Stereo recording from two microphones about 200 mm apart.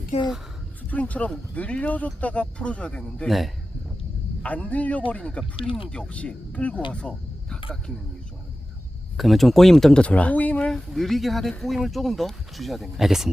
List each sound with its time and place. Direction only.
0.1 s speech: 35° left (ahead or behind)
0.9 s a man's voice: 5° left (ahead or behind)
6.9 s a sound: 5° left (ahead or behind)
9.1 s speech: centre (ahead or behind)